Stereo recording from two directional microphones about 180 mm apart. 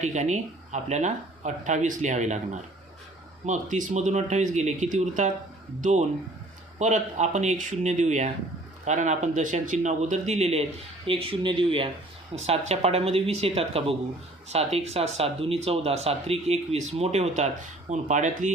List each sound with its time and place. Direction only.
0.0 s speech: 40° right (ahead or behind)